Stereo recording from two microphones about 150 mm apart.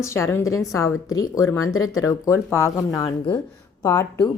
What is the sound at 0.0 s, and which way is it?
Speech, 20° left (ahead or behind).